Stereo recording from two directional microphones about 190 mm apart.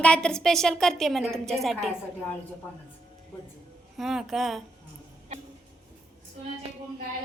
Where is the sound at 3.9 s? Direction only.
Centre (ahead or behind).